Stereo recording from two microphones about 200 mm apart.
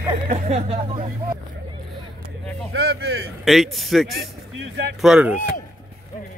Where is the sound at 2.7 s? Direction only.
55° right (ahead or behind).